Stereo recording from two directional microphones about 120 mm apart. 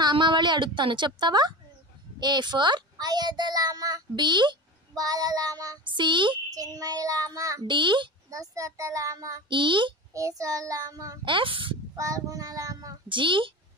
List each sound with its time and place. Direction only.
0.0 s a child's voice: 40° right (ahead or behind)
6.5 s child singing: 30° right (ahead or behind)
7.7 s a child's voice: 40° right (ahead or behind)
8.3 s child singing: 30° right (ahead or behind)
9.5 s a child's voice: 45° right (ahead or behind)
10.1 s child singing: 30° right (ahead or behind)
11.2 s a child's voice: 45° right (ahead or behind)
11.9 s child singing: 30° right (ahead or behind)
13.1 s a child's voice: 45° right (ahead or behind)